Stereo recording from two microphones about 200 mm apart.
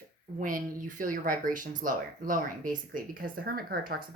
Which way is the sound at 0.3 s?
40° right (ahead or behind).